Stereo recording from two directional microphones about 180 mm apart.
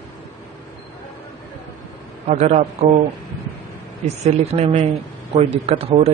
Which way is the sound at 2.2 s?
40° right (ahead or behind).